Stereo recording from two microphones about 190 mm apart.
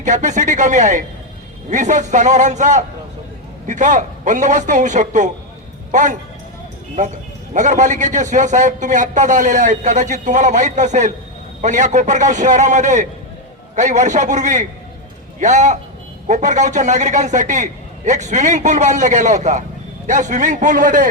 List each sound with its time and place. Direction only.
0.0 s a man's voice: 40° right (ahead or behind)